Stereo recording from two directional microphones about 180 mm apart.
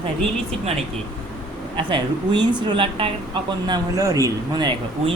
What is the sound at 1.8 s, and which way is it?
Speech, 25° right (ahead or behind).